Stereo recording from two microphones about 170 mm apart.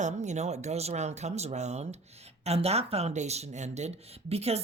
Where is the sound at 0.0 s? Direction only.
45° right (ahead or behind).